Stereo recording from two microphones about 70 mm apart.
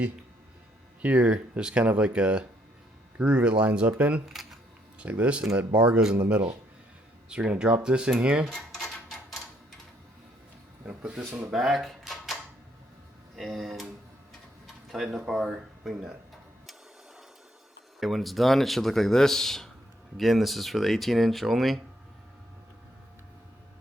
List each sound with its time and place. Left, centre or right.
1.0 s speech: centre
8.5 s a sound: centre
9.0 s typewriter: centre
10.8 s speech: centre
11.5 s a sound: centre
13.3 s speech: centre
14.8 s speech: centre
18.0 s speech: centre